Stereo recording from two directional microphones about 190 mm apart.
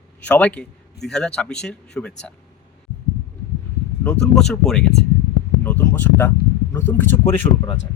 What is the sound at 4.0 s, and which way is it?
A man's voice, 5° left (ahead or behind).